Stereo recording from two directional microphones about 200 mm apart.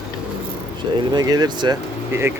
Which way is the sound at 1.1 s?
20° right (ahead or behind).